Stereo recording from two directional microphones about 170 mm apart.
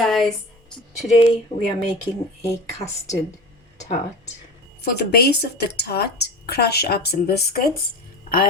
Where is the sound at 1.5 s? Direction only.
40° left (ahead or behind).